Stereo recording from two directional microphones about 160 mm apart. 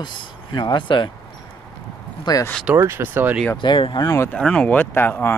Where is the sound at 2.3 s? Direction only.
25° left (ahead or behind).